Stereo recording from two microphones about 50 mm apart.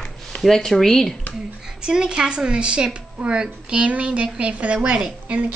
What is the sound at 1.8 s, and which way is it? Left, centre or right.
A woman's voice, centre.